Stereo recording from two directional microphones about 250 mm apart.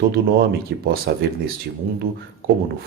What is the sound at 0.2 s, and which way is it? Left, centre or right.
Speech, right.